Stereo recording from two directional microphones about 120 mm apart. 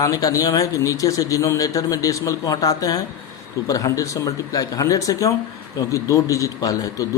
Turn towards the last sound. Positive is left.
turn(degrees=25)  # may be behind; listen again after turning